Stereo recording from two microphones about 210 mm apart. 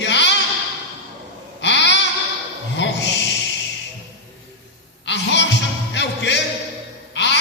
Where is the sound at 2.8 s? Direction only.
60° left (ahead or behind).